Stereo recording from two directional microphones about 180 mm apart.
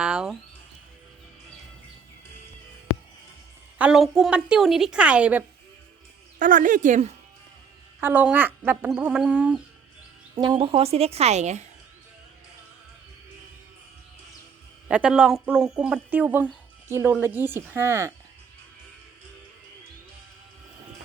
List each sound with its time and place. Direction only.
0.0 s speech: 5° right (ahead or behind)
3.8 s a woman's voice: 5° right (ahead or behind)
6.4 s speech: 45° right (ahead or behind)
8.0 s speech: 10° right (ahead or behind)
10.3 s a woman's voice: 25° right (ahead or behind)
14.8 s a woman's voice: 5° right (ahead or behind)